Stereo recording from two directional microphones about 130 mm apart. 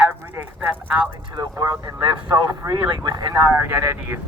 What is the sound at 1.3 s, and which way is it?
Speech, 30° right (ahead or behind).